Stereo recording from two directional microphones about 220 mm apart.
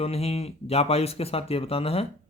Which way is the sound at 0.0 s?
30° left (ahead or behind).